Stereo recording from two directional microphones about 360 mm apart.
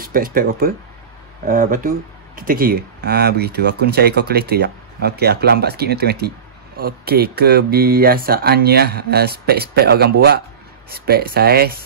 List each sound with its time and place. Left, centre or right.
0.0 s speech: right